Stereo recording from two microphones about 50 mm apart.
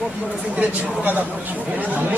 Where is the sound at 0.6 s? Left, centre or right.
Right.